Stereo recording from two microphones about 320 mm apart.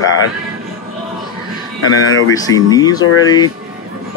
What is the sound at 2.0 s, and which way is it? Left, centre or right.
Speech, left.